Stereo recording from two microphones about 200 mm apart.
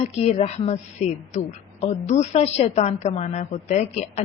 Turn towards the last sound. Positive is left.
turn(degrees=35)  # may be behind; listen again after turning